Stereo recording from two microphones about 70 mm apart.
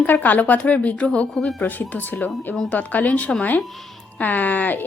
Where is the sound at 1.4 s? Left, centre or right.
Centre.